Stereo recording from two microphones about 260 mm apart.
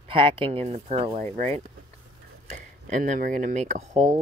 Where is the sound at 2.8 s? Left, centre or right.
Right.